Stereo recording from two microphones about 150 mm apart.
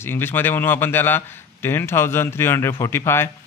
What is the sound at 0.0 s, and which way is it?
A man's voice, 15° left (ahead or behind).